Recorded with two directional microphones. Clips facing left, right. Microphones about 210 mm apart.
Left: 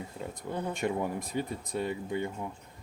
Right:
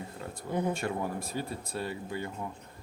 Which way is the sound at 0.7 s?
20° left (ahead or behind).